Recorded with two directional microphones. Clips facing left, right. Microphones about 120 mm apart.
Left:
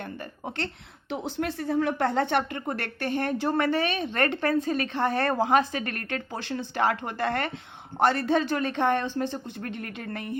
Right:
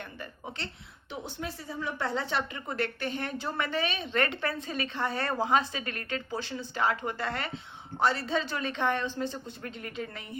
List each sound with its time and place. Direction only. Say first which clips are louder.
0.0 s speech: left 5 dB; 50° left (ahead or behind)
1.1 s speech: left 8 dB; 90° left; by 10.3 s 55° left (ahead or behind)